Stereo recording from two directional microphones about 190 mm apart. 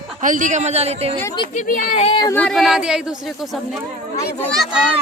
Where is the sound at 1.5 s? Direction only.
40° left (ahead or behind).